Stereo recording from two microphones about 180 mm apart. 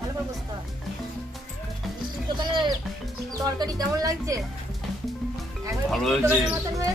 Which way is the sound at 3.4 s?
20° right (ahead or behind).